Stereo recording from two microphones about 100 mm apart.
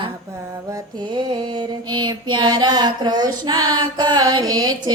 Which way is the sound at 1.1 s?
50° right (ahead or behind).